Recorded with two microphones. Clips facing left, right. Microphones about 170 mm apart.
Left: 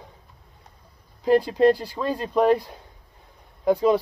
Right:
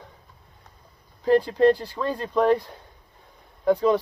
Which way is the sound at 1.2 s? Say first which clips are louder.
Even; 10° left (ahead or behind).